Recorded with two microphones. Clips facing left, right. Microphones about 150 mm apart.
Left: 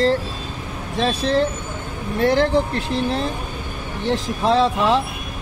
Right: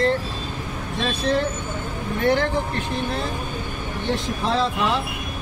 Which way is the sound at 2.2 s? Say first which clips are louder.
Left 3 dB; 35° left (ahead or behind).